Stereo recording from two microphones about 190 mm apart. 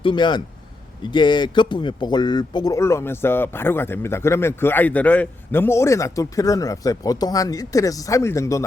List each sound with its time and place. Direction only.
0.0 s a man's voice: 25° left (ahead or behind)